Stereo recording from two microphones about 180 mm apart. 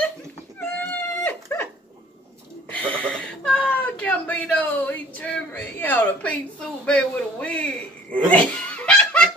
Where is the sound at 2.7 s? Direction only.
5° left (ahead or behind).